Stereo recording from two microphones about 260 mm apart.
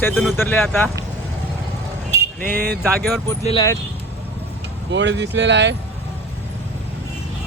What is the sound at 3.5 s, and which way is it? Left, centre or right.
Speech, centre.